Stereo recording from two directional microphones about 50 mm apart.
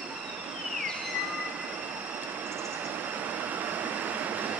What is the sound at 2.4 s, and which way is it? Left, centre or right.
Train, right.